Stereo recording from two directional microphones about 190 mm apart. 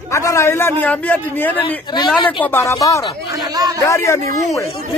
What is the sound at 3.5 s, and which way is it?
Speech, 20° right (ahead or behind).